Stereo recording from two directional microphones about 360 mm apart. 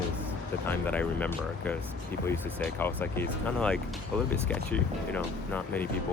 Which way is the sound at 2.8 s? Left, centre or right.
Centre.